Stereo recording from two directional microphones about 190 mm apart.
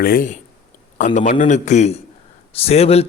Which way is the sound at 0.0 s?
50° left (ahead or behind).